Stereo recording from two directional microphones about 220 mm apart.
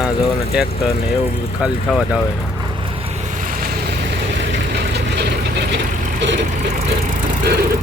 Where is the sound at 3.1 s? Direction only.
35° right (ahead or behind).